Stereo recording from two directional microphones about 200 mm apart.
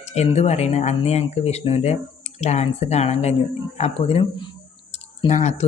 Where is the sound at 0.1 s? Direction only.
35° left (ahead or behind).